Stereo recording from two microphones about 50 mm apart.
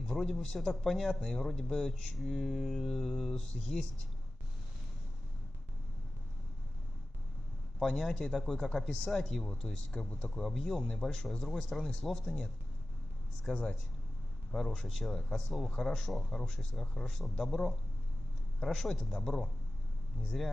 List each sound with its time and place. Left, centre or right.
0.0 s a man's voice: centre
7.8 s a man's voice: centre
13.5 s a man's voice: centre
14.5 s a man's voice: centre
16.8 s a man's voice: centre